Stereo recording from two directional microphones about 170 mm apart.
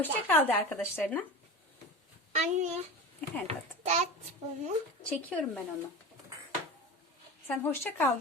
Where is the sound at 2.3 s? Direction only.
45° right (ahead or behind).